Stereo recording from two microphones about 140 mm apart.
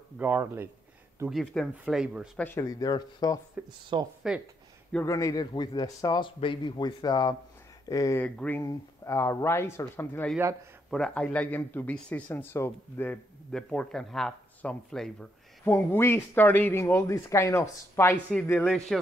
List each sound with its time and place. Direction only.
0.2 s a man's voice: 15° right (ahead or behind)
1.3 s speech: centre (ahead or behind)
2.3 s speech: 15° left (ahead or behind)
2.6 s a man's voice: 25° left (ahead or behind)
3.6 s a man's voice: 10° right (ahead or behind)
5.0 s a man's voice: 25° left (ahead or behind)
8.2 s speech: 15° left (ahead or behind)
15.6 s speech: 15° left (ahead or behind)
18.3 s speech: 5° left (ahead or behind)